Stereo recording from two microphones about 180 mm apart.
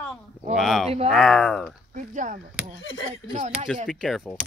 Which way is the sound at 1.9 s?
45° right (ahead or behind).